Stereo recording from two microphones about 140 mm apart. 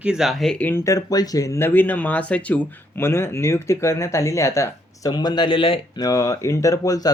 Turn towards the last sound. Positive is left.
turn(degrees=25)  # may be behind; listen again after turning